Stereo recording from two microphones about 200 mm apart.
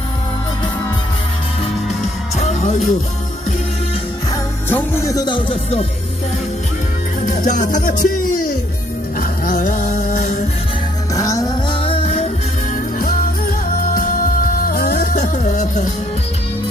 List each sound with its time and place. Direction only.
2.0 s music: 35° left (ahead or behind)
4.7 s speech: 15° left (ahead or behind)
7.3 s music: 40° left (ahead or behind)
9.5 s music: 40° left (ahead or behind)
11.1 s music: 15° left (ahead or behind)
14.6 s music: 50° left (ahead or behind)